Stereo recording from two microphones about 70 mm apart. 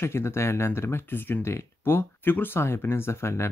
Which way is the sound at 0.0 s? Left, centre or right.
Left.